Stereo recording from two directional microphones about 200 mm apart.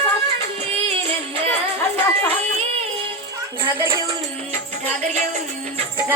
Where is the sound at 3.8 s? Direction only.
10° right (ahead or behind).